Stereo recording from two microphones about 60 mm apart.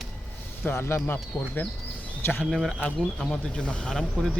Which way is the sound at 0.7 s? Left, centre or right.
Left.